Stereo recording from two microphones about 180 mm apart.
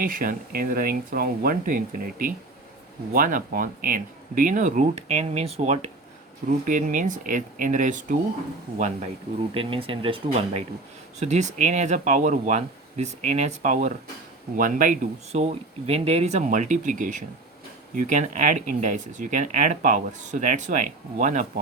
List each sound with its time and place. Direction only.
0.0 s speech: 50° right (ahead or behind)
9.6 s speech: 30° right (ahead or behind)